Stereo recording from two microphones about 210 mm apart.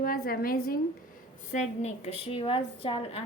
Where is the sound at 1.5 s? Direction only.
35° left (ahead or behind).